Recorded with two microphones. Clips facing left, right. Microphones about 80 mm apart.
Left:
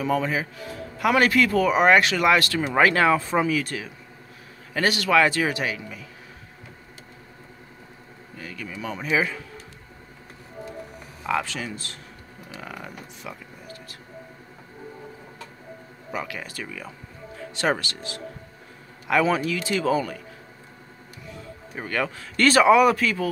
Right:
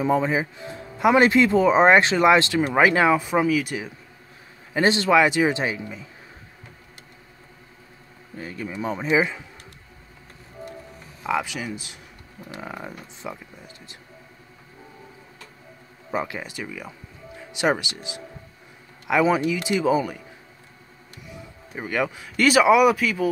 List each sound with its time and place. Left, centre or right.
0.0 s a man's voice: right; by 3.7 s centre
4.7 s a man's voice: right
8.4 s a man's voice: right
11.2 s speech: centre
12.5 s speech: right
16.1 s speech: right
21.3 s speech: centre